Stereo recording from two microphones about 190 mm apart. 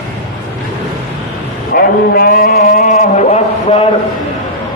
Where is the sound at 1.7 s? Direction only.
50° left (ahead or behind); by 3.8 s 30° left (ahead or behind).